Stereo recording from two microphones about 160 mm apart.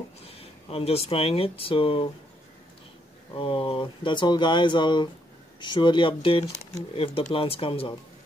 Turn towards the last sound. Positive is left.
turn(degrees=35)  # may be behind; listen again after turning